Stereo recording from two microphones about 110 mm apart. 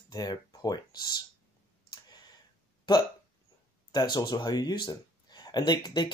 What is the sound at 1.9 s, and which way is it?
Clicking, 35° left (ahead or behind).